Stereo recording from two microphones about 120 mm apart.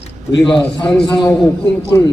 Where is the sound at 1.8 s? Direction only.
30° left (ahead or behind).